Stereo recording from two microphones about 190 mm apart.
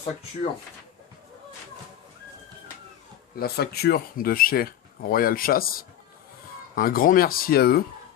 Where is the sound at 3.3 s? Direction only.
55° left (ahead or behind).